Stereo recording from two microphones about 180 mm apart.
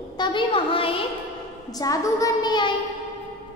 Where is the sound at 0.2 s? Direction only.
25° left (ahead or behind).